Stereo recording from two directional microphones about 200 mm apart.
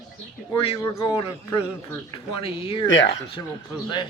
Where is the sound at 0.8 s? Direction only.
20° left (ahead or behind).